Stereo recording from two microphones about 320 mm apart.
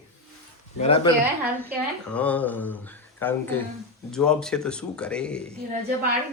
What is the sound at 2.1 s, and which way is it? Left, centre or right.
A man's voice, centre.